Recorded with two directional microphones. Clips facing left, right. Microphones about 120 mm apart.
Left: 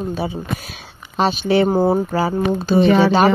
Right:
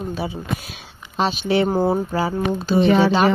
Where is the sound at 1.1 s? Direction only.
45° left (ahead or behind).